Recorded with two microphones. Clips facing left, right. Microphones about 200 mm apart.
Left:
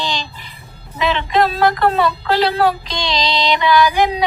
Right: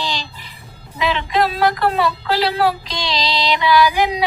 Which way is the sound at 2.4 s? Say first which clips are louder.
Left 2 dB; 5° right (ahead or behind).